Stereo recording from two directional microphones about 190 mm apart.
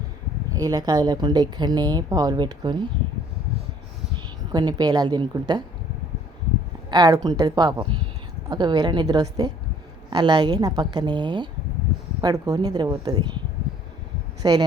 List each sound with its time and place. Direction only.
0.5 s speech: 20° right (ahead or behind)
4.5 s speech: 20° right (ahead or behind)
6.9 s speech: 20° right (ahead or behind)
14.4 s speech: 20° right (ahead or behind)